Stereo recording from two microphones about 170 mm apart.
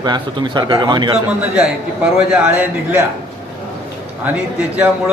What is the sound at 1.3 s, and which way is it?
Speech, 5° right (ahead or behind).